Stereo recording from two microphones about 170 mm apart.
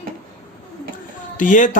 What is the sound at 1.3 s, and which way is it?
Speech, 50° left (ahead or behind).